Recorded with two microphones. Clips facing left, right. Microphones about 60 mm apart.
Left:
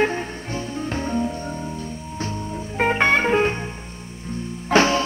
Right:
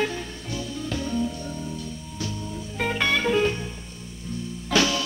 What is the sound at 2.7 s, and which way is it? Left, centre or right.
Music, left.